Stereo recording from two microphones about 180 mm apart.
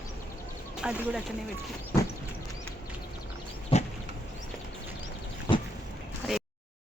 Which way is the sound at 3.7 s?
30° left (ahead or behind).